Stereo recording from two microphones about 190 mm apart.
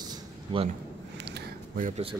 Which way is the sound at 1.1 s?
65° right (ahead or behind).